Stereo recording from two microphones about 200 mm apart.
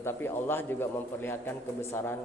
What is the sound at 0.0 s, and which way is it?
A man's voice, 10° left (ahead or behind).